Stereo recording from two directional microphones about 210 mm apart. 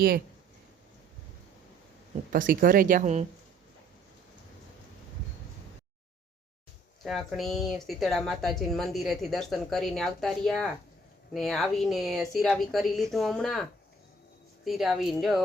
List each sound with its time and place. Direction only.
2.3 s speech: 40° right (ahead or behind)
7.0 s speech: centre (ahead or behind)